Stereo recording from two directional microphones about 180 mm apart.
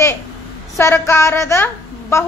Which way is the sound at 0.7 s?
15° left (ahead or behind).